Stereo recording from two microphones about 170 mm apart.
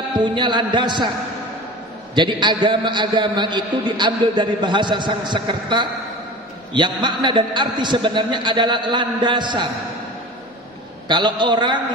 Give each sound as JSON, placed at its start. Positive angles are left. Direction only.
{"t": 0.2, "sound": "a man's voice", "side_deg": -25}
{"t": 2.1, "sound": "a man's voice", "side_deg": -25}
{"t": 11.1, "sound": "a man's voice", "side_deg": -25}